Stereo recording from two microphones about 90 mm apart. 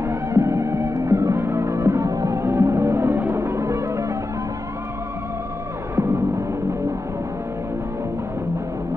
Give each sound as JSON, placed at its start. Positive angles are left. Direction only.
{"t": 0.0, "sound": "music", "side_deg": -30}
{"t": 5.9, "sound": "music", "side_deg": -30}